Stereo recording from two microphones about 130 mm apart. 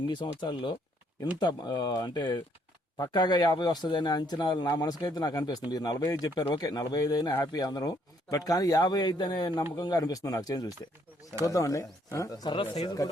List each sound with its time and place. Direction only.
0.1 s speech: 35° left (ahead or behind)